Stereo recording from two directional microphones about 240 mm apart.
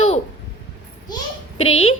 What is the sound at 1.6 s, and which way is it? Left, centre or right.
Speech, left.